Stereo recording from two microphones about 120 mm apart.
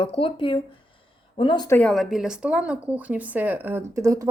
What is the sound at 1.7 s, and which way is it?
Speech, 10° left (ahead or behind).